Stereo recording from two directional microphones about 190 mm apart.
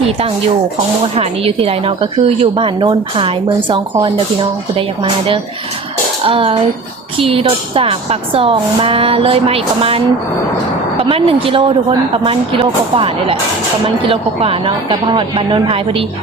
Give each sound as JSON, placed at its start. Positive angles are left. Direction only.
{"t": 0.0, "sound": "speech", "side_deg": -30}
{"t": 6.2, "sound": "speech", "side_deg": -30}
{"t": 11.0, "sound": "speech", "side_deg": -30}